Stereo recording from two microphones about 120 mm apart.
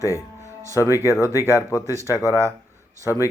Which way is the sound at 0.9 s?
25° left (ahead or behind).